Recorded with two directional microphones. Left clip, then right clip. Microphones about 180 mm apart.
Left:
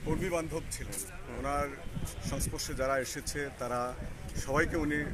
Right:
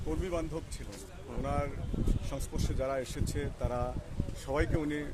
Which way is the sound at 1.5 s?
5° right (ahead or behind).